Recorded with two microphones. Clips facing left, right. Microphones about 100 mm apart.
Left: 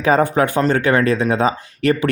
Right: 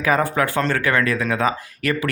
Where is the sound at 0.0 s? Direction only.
25° left (ahead or behind).